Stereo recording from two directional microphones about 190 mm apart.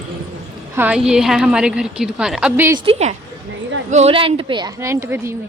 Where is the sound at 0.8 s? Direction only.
5° right (ahead or behind).